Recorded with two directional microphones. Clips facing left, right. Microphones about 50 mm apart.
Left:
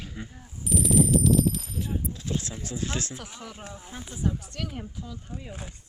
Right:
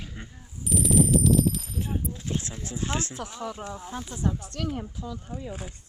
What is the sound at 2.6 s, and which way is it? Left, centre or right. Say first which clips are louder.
Speech: right 1 dB; right.